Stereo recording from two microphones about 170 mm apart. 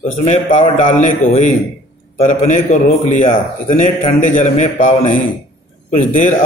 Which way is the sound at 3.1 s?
45° left (ahead or behind).